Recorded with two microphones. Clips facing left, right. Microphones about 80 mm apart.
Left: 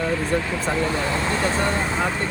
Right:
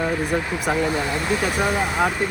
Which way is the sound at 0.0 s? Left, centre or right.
Centre.